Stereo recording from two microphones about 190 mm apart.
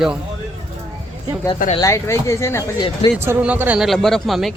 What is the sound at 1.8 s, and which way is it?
Speech, 15° left (ahead or behind).